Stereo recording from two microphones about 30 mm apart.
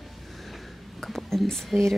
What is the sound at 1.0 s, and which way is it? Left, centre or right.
Speech, centre.